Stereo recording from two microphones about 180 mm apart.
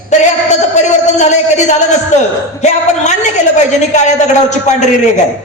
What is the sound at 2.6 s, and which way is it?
Speech, 40° left (ahead or behind).